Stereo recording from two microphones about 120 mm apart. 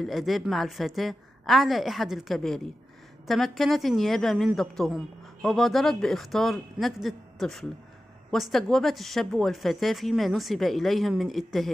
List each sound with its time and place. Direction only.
0.0 s speech: centre (ahead or behind)